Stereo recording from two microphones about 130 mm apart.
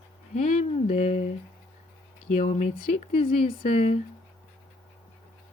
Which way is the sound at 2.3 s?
70° left (ahead or behind).